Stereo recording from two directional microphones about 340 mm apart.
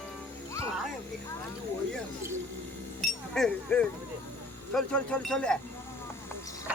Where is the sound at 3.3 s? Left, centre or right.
Centre.